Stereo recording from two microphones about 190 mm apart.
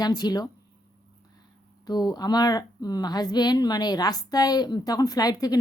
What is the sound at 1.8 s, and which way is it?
A woman's voice, 20° left (ahead or behind).